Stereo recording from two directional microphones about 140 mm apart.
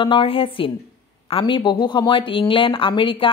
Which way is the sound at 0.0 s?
40° left (ahead or behind).